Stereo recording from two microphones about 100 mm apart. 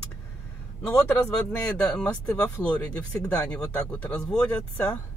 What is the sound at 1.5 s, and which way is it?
Speech, 10° left (ahead or behind).